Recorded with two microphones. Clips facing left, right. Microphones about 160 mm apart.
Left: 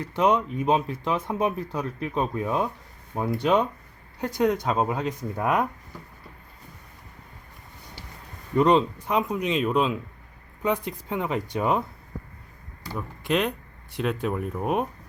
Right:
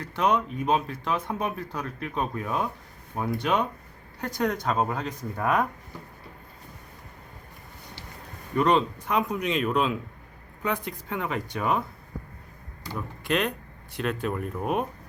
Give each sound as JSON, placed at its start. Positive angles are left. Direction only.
{"t": 0.0, "sound": "speech", "side_deg": 25}
{"t": 8.5, "sound": "speech", "side_deg": 25}
{"t": 12.9, "sound": "speech", "side_deg": 5}
{"t": 13.9, "sound": "speech", "side_deg": 20}